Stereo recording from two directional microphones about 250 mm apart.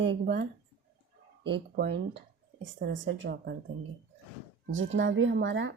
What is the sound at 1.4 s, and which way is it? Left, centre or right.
Speech, centre.